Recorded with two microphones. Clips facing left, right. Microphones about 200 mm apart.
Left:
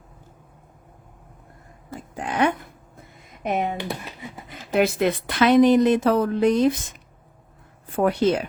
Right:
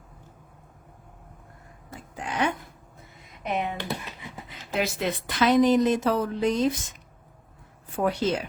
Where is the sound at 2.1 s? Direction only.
55° left (ahead or behind).